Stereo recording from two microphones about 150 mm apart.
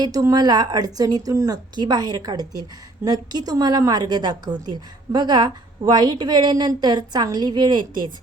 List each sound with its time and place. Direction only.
0.0 s a woman's voice: 25° right (ahead or behind)